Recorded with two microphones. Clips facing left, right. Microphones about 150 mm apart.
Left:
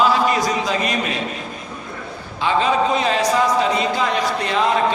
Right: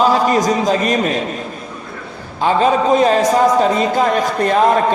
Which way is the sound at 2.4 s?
45° right (ahead or behind).